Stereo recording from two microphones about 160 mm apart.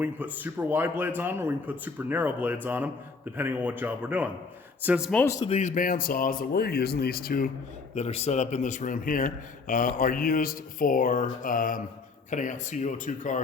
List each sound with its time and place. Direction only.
0.0 s speech: 10° right (ahead or behind)
5.1 s speech: 15° left (ahead or behind)
5.5 s speech: 50° left (ahead or behind); by 7.5 s 65° left (ahead or behind)
7.9 s speech: 40° left (ahead or behind)